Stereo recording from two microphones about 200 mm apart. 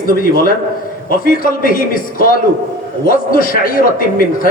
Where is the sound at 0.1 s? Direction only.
45° left (ahead or behind).